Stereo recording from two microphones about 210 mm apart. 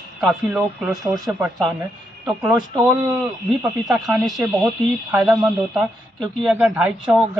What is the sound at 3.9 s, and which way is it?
Speech, centre (ahead or behind).